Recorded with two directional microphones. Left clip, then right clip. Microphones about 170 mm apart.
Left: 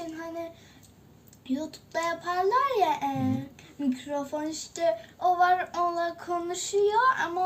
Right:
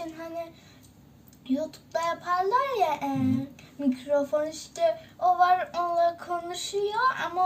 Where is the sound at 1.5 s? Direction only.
5° right (ahead or behind).